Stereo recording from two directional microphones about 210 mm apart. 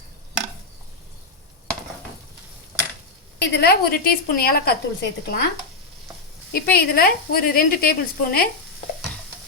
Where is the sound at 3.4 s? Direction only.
50° left (ahead or behind).